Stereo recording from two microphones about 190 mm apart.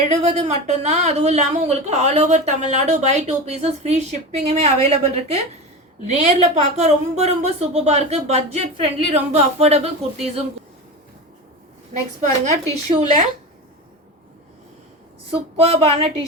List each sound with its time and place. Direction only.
0.0 s speech: 35° right (ahead or behind)
11.9 s speech: 35° right (ahead or behind)
15.7 s speech: 30° right (ahead or behind)